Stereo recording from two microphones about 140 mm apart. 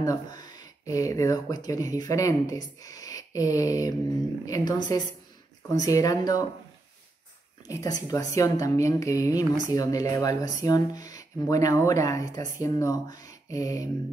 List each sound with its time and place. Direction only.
0.0 s speech: 25° left (ahead or behind)
7.6 s speech: 25° left (ahead or behind)